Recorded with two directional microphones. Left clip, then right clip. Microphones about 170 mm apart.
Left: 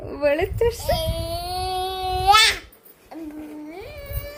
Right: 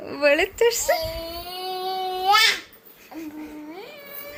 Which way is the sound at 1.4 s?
40° left (ahead or behind).